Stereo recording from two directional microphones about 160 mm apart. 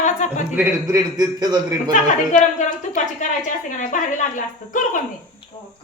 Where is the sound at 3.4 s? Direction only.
50° left (ahead or behind).